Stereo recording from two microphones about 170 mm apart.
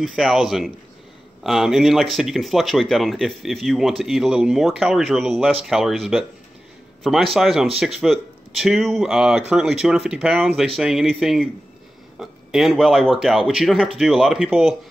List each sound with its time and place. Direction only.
0.0 s a man's voice: centre (ahead or behind)